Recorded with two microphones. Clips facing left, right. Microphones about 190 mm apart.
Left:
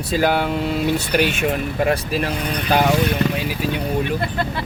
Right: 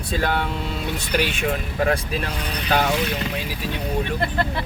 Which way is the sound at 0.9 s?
60° left (ahead or behind).